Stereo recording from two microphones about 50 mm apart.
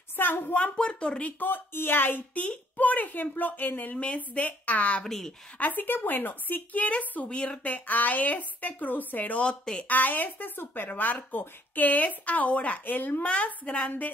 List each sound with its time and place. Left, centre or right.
0.1 s speech: left
0.7 s speech: centre
1.4 s speech: left
2.3 s a woman's voice: left
5.0 s a woman's voice: centre
5.6 s a woman's voice: left
7.2 s a woman's voice: left
9.8 s a woman's voice: left
10.9 s a woman's voice: left
12.8 s a woman's voice: left